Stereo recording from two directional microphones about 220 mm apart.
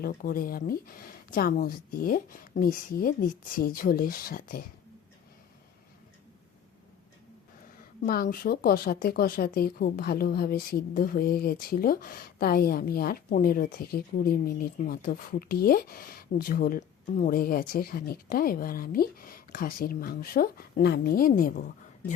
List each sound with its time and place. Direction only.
0.0 s speech: 40° left (ahead or behind)
8.0 s speech: 40° left (ahead or behind)